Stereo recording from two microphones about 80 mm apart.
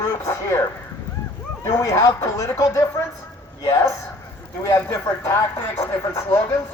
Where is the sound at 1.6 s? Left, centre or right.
Left.